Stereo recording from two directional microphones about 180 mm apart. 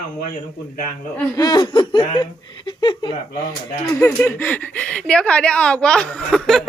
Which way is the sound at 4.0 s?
10° left (ahead or behind).